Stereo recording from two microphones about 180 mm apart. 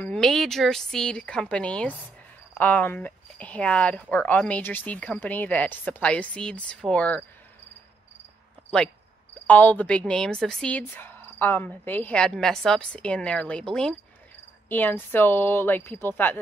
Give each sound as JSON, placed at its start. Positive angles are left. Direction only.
{"t": 0.0, "sound": "speech", "side_deg": 5}
{"t": 9.5, "sound": "speech", "side_deg": 10}